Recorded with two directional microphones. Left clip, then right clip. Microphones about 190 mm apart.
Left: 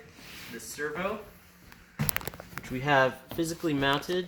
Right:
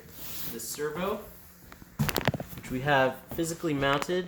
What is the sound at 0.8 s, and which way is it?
Speech, 20° right (ahead or behind).